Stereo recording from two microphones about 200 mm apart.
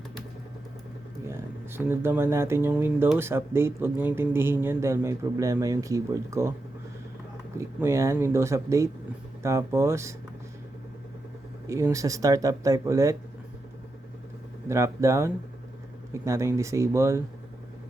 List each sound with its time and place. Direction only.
1.3 s speech: 10° right (ahead or behind)
7.6 s speech: 15° right (ahead or behind)
11.7 s speech: 15° right (ahead or behind)
14.7 s speech: 15° right (ahead or behind)